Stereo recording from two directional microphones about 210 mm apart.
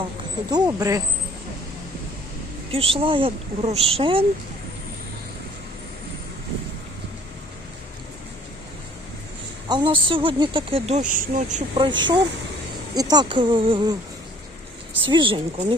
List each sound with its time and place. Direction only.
0.5 s speech: 15° right (ahead or behind)
2.7 s speech: 25° right (ahead or behind)
9.6 s speech: 20° right (ahead or behind); by 11.6 s 40° right (ahead or behind)
11.7 s speech: 20° right (ahead or behind)
15.0 s speech: 25° right (ahead or behind)